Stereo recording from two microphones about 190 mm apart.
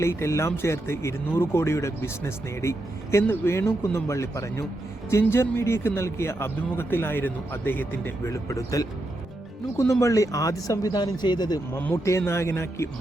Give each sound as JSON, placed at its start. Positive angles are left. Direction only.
{"t": 0.0, "sound": "speech", "side_deg": 15}